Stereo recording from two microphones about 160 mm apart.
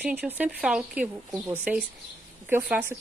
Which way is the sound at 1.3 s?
20° right (ahead or behind).